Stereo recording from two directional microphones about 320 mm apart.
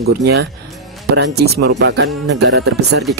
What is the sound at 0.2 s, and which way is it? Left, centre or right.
Speech, right.